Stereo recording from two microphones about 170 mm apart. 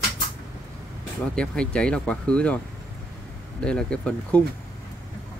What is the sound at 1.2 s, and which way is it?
Speech, 5° left (ahead or behind).